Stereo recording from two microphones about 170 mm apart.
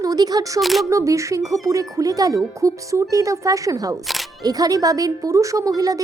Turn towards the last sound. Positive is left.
turn(degrees=-20)  # may be behind; listen again after turning